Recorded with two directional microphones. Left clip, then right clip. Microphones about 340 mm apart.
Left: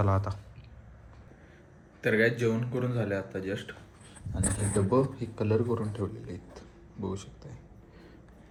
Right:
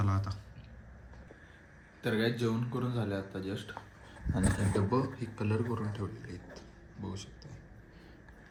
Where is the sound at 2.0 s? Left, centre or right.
Centre.